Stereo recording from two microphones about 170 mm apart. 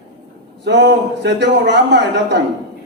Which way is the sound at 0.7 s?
90° right.